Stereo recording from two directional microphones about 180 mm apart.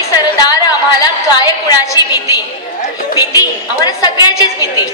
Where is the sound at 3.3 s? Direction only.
20° left (ahead or behind).